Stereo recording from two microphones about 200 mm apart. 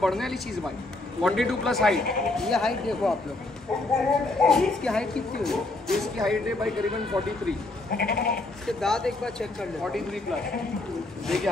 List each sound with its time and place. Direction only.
0.0 s a woman's voice: centre (ahead or behind)
4.4 s a woman's voice: 5° left (ahead or behind)
7.1 s speech: 15° right (ahead or behind)
7.9 s goat: 50° left (ahead or behind)
8.6 s a woman's voice: centre (ahead or behind)